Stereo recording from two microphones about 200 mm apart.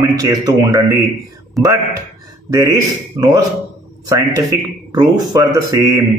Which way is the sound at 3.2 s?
20° right (ahead or behind).